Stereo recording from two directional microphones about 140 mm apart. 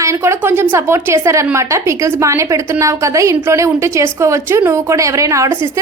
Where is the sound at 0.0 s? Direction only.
20° right (ahead or behind).